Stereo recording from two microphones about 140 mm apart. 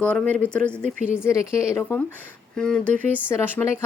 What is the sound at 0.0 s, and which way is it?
Speech, 10° left (ahead or behind).